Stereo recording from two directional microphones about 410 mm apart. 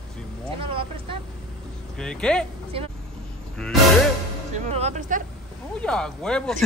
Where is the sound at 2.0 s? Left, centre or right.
Centre.